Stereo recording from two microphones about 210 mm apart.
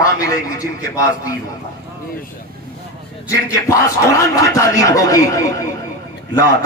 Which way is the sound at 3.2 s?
15° left (ahead or behind).